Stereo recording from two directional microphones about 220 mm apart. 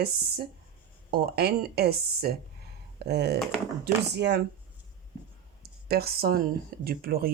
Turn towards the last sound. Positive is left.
turn(degrees=-45)  # may be behind; listen again after turning